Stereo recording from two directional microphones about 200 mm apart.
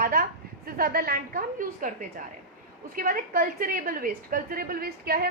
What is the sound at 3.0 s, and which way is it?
A woman's voice, 45° right (ahead or behind).